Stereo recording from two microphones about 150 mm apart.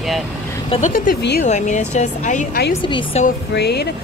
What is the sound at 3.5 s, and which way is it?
Speech, 90° left.